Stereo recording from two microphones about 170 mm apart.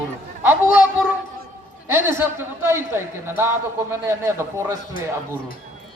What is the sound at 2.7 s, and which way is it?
A man's voice, 15° right (ahead or behind).